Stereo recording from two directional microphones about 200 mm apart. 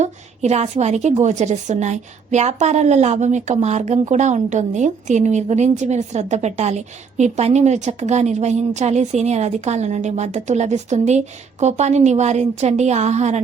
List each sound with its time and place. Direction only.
0.0 s a woman's voice: 35° right (ahead or behind)